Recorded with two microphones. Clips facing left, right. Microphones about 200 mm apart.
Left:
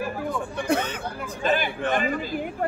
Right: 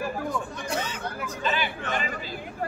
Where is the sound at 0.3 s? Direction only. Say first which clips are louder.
Left 5 dB; 60° left (ahead or behind).